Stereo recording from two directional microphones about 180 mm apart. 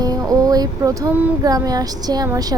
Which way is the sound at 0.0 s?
20° right (ahead or behind).